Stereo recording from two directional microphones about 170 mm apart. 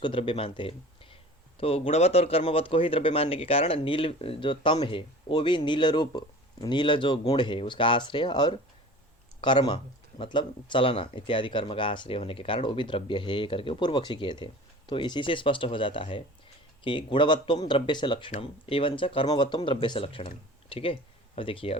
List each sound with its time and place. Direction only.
0.0 s speech: 30° left (ahead or behind)